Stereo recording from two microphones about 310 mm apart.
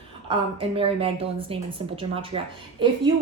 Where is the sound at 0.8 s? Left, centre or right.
Centre.